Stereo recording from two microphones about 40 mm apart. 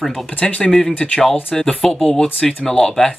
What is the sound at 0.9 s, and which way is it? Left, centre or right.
Speech, left.